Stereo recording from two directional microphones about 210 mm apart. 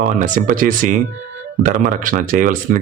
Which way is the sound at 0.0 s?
35° right (ahead or behind).